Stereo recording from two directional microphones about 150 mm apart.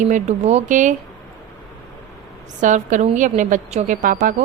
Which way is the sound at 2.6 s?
55° right (ahead or behind).